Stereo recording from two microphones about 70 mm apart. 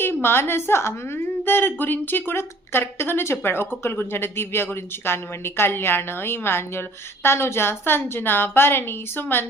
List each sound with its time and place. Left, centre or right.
0.0 s speech: left